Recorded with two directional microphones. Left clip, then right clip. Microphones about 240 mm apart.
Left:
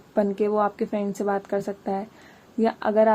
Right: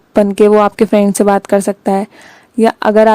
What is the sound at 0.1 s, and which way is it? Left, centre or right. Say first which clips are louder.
A woman's voice: right 14 dB; right.